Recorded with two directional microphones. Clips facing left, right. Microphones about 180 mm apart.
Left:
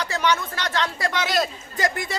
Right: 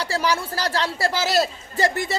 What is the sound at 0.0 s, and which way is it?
A man's voice, 35° right (ahead or behind).